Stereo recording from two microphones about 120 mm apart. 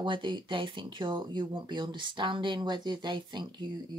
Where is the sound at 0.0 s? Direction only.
40° right (ahead or behind).